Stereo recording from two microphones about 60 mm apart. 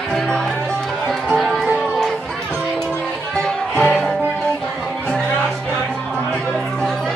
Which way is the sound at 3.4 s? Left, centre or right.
Centre.